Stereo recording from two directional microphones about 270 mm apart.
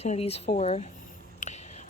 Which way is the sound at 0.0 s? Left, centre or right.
Left.